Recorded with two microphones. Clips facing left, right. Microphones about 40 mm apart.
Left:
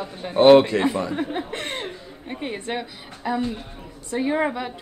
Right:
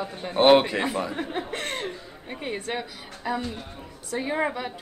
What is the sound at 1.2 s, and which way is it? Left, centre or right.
Speech, centre.